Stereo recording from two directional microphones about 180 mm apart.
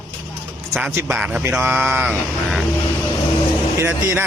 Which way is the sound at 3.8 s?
15° right (ahead or behind).